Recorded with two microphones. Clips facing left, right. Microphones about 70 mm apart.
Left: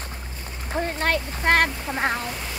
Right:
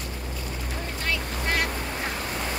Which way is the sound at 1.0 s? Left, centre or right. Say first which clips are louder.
Left 5 dB; left.